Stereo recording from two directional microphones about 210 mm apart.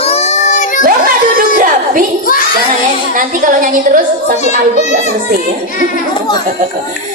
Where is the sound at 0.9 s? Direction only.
40° right (ahead or behind).